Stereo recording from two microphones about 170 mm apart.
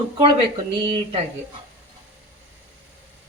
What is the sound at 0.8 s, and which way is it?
Speech, 30° right (ahead or behind).